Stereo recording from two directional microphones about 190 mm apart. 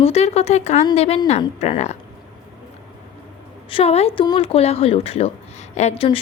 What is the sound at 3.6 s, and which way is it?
Speech, 30° left (ahead or behind).